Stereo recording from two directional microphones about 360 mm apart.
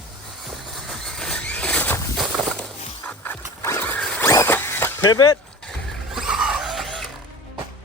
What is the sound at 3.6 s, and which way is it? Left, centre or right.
Zipper, centre.